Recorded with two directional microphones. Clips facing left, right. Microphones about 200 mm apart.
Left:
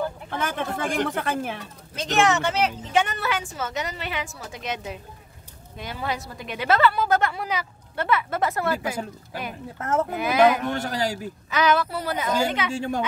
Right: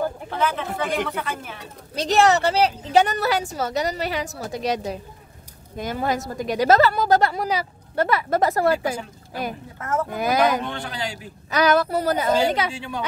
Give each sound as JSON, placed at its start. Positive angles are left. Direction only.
{"t": 0.4, "sound": "speech", "side_deg": 50}
{"t": 2.0, "sound": "a woman's voice", "side_deg": -35}
{"t": 9.8, "sound": "speech", "side_deg": 30}
{"t": 10.1, "sound": "a woman's voice", "side_deg": -40}
{"t": 10.7, "sound": "a man's voice", "side_deg": 40}
{"t": 11.5, "sound": "a woman's voice", "side_deg": -40}
{"t": 12.7, "sound": "speech", "side_deg": 45}